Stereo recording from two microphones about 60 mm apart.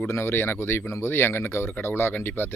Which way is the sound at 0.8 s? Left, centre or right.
Left.